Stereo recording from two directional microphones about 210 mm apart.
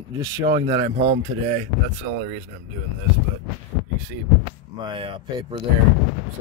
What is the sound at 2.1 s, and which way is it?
Speech, 65° right (ahead or behind).